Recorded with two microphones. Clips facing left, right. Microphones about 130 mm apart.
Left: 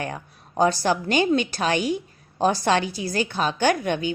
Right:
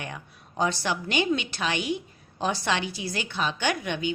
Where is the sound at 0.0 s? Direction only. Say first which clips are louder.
Left 7 dB; 40° left (ahead or behind).